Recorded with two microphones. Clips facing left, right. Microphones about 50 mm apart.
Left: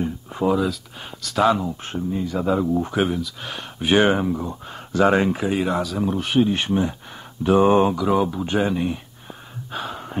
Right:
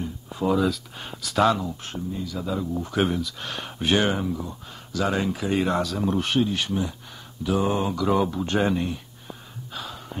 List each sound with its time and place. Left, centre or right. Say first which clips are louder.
0.0 s a sound: left 5 dB; left
0.5 s speech: left 1 dB; centre
1.5 s speech: left 4 dB; centre
1.9 s speech: left 6 dB; left
3.0 s speech: left 2 dB; centre
3.9 s speech: left 6 dB; left
5.5 s speech: left 1 dB; centre
6.4 s speech: left 5 dB; left
7.9 s speech: left 2 dB; centre
9.7 s gasp: left 6 dB; left